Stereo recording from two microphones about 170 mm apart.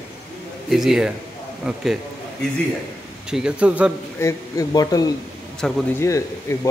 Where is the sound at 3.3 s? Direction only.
5° right (ahead or behind).